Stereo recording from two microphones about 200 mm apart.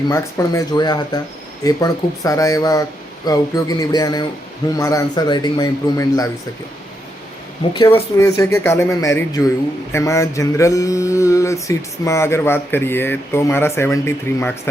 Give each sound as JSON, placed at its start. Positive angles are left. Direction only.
{"t": 0.1, "sound": "speech", "side_deg": 15}
{"t": 1.6, "sound": "mantra", "side_deg": 15}
{"t": 3.2, "sound": "speech", "side_deg": 20}
{"t": 4.8, "sound": "mantra", "side_deg": 15}
{"t": 7.9, "sound": "mantra", "side_deg": 10}